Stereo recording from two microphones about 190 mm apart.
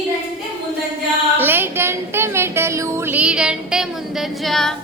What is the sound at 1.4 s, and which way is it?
Music, 10° right (ahead or behind).